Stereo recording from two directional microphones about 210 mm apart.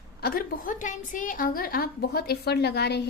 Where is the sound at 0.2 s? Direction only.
45° left (ahead or behind).